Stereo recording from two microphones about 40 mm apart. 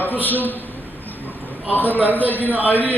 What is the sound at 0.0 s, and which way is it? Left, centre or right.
Speech, left.